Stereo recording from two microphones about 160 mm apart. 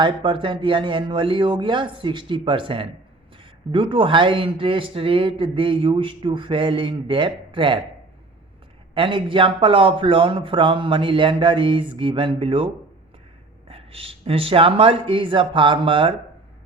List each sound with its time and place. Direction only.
0.0 s speech: 30° right (ahead or behind)
9.0 s speech: 30° right (ahead or behind)